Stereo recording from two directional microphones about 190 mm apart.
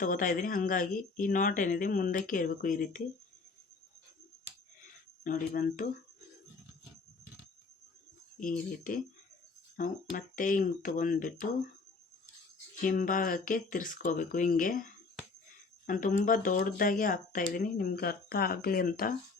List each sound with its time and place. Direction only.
0.0 s speech: 45° left (ahead or behind)
5.2 s speech: 45° left (ahead or behind)
8.4 s speech: 45° left (ahead or behind)
12.8 s speech: 45° left (ahead or behind)